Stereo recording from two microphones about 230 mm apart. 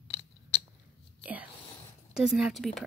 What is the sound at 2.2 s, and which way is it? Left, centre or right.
Speech, centre.